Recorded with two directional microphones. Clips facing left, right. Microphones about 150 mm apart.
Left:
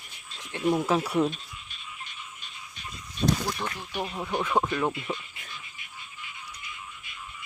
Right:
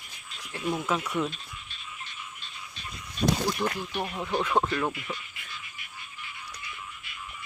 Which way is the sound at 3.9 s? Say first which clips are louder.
Right 1 dB; 10° left (ahead or behind).